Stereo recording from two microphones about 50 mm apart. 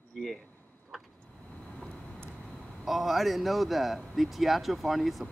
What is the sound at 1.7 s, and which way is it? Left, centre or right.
Vehicle, centre.